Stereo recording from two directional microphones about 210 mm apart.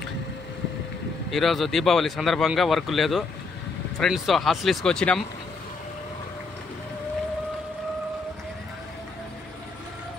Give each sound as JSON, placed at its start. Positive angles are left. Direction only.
{"t": 1.3, "sound": "speech", "side_deg": 0}